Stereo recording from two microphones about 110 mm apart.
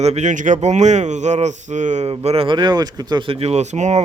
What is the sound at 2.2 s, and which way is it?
Speech, 60° right (ahead or behind).